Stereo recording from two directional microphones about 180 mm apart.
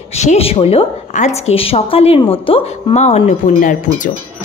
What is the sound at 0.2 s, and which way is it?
A woman's voice, 35° left (ahead or behind).